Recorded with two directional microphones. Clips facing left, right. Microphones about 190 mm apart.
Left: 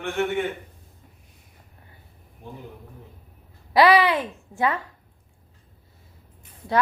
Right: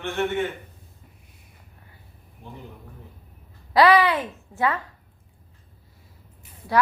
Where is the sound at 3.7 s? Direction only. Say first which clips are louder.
Even; 15° left (ahead or behind).